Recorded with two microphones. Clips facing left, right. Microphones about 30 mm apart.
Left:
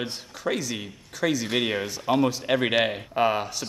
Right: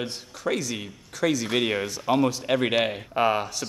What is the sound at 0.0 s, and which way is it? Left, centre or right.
A man's voice, centre.